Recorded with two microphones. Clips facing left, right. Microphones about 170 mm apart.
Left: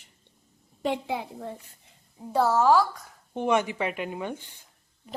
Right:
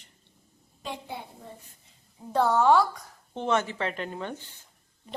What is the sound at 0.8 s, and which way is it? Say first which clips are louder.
Speech: left 9 dB; 80° left.